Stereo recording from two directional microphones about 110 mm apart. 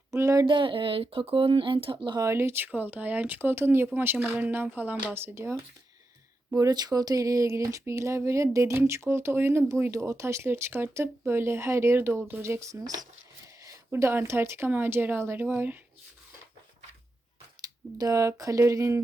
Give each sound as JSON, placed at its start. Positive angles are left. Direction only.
{"t": 0.1, "sound": "speech", "side_deg": -25}
{"t": 0.4, "sound": "speech", "side_deg": -45}
{"t": 2.1, "sound": "speech", "side_deg": -25}
{"t": 6.5, "sound": "speech", "side_deg": -35}
{"t": 17.9, "sound": "speech", "side_deg": -35}